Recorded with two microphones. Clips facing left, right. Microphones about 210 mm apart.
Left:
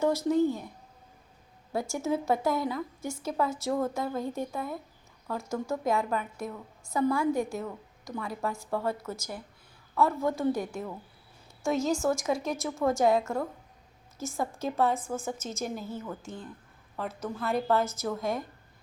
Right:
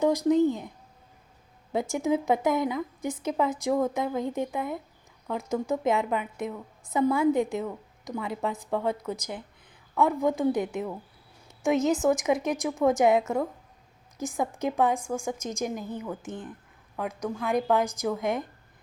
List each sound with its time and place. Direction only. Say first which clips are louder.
0.0 s a woman's voice: right 3 dB; 15° right (ahead or behind)
1.7 s a woman's voice: right 4 dB; 20° right (ahead or behind)